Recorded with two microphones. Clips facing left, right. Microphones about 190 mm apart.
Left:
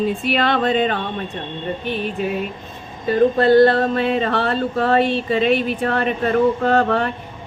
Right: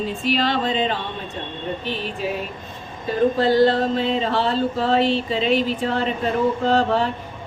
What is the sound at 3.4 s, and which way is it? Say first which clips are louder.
Speech: left 4 dB; 60° left (ahead or behind).